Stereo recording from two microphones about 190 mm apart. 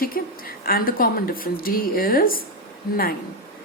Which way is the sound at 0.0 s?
50° left (ahead or behind).